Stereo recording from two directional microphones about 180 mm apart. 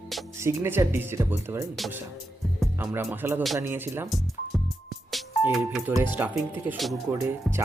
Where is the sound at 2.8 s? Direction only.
10° right (ahead or behind).